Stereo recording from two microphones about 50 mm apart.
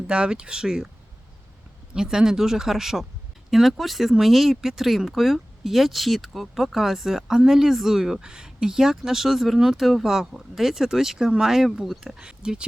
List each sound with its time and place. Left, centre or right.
0.1 s speech: centre
1.9 s speech: centre